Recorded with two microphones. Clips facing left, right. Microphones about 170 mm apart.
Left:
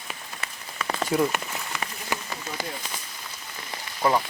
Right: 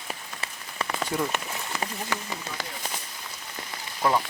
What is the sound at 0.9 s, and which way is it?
Speech, 5° left (ahead or behind).